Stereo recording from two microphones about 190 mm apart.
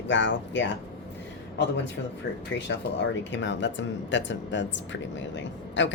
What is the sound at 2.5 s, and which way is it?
Speech, 70° left (ahead or behind).